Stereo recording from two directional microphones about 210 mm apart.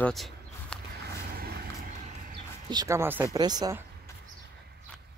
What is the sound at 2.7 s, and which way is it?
Speech, 15° right (ahead or behind).